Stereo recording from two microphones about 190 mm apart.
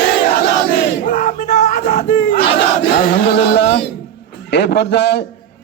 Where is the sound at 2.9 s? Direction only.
55° left (ahead or behind).